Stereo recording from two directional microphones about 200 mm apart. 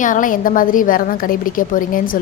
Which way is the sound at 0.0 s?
40° left (ahead or behind).